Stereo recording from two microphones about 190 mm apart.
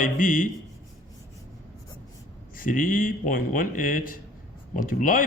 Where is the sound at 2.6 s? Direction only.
45° left (ahead or behind).